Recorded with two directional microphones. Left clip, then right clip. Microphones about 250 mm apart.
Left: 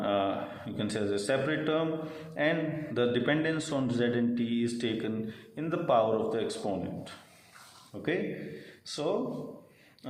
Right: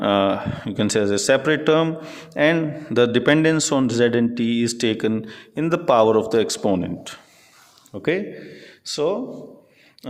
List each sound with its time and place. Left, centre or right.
0.0 s a man's voice: right